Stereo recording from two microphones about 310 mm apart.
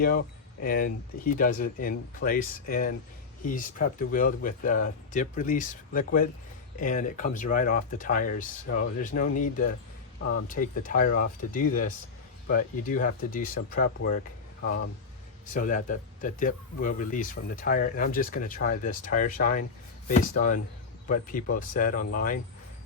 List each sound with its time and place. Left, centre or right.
0.0 s speech: left
15.5 s speech: left